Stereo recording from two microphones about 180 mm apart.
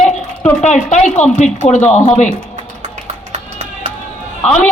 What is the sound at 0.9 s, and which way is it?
A man's voice, 40° left (ahead or behind).